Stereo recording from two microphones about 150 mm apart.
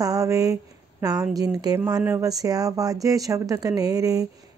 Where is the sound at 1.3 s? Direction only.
25° right (ahead or behind).